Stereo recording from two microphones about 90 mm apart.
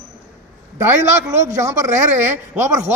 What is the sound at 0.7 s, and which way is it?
A man's voice, 30° right (ahead or behind).